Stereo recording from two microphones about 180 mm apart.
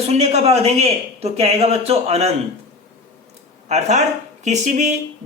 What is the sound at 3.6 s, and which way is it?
Speech, 40° right (ahead or behind).